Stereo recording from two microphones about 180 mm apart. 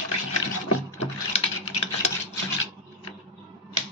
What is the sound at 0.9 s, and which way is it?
Computer keyboard, 40° left (ahead or behind).